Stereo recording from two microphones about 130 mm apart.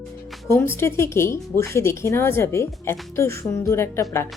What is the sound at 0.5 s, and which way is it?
Speech, 20° left (ahead or behind).